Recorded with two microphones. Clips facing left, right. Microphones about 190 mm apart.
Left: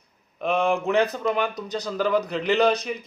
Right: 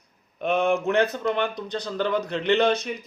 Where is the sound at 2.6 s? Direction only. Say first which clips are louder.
Left 1 dB; 35° left (ahead or behind).